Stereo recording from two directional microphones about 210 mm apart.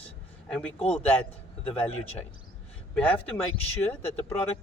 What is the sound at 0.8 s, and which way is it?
Speech, 30° left (ahead or behind).